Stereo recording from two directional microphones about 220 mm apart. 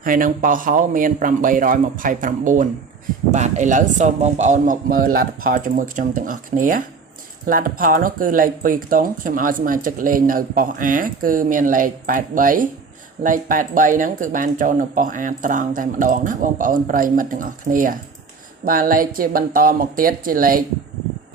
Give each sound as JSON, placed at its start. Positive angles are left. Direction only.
{"t": 0.0, "sound": "speech", "side_deg": -40}